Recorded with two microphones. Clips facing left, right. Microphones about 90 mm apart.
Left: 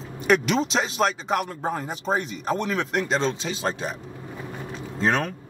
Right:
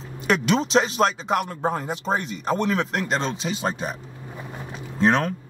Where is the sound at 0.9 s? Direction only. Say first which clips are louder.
Right 2 dB; 35° right (ahead or behind).